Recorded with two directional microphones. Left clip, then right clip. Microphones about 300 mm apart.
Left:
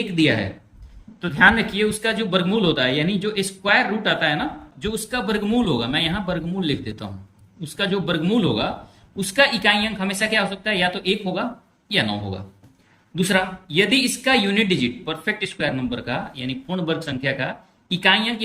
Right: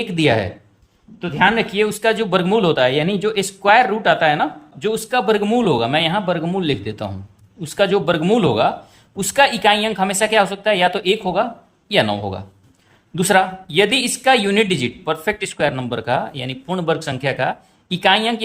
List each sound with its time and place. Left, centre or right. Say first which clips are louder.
0.2 s speech: right 3 dB; centre
1.2 s speech: even; centre